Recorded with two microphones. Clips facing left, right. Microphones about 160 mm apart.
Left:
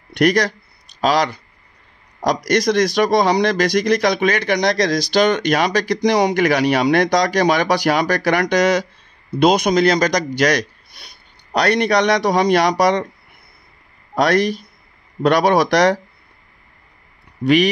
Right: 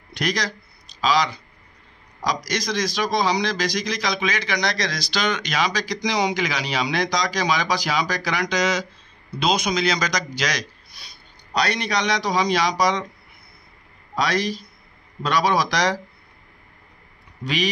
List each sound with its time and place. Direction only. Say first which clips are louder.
0.1 s speech: left 10 dB; 60° left (ahead or behind)
14.1 s speech: left 7 dB; 60° left (ahead or behind)
17.4 s speech: left 11 dB; 60° left (ahead or behind)